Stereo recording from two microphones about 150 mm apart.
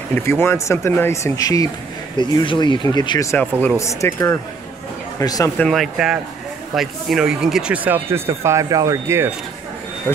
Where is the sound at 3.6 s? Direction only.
15° left (ahead or behind).